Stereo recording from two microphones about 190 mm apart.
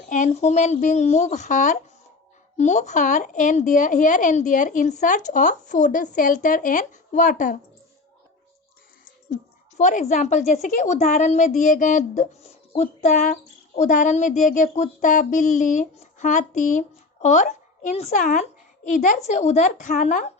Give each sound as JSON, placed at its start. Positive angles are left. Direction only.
{"t": 0.1, "sound": "a woman's voice", "side_deg": 40}
{"t": 9.3, "sound": "a woman's voice", "side_deg": 40}